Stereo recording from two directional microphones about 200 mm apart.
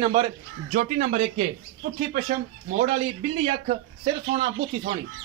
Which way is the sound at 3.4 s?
35° right (ahead or behind).